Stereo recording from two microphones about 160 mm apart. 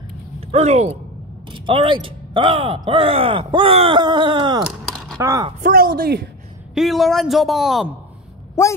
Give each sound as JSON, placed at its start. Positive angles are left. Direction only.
{"t": 0.5, "sound": "speech", "side_deg": -45}
{"t": 1.5, "sound": "speech", "side_deg": -30}
{"t": 4.9, "sound": "a sound", "side_deg": 5}
{"t": 5.2, "sound": "speech", "side_deg": -20}
{"t": 5.6, "sound": "speech", "side_deg": -65}
{"t": 6.7, "sound": "a man's voice", "side_deg": 0}
{"t": 8.6, "sound": "speech", "side_deg": 15}